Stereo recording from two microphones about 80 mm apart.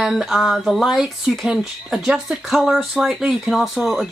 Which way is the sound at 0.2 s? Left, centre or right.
Centre.